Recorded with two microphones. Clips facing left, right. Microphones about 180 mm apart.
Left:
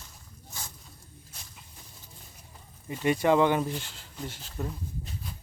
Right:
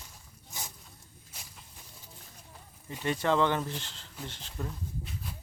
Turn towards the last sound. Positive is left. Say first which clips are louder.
# left 3 dB
turn(degrees=5)  # may be behind; listen again after turning